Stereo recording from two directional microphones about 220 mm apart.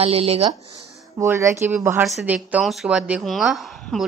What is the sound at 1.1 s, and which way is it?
Speech, 10° right (ahead or behind).